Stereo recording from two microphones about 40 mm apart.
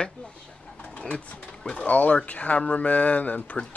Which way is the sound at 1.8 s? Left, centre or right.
Left.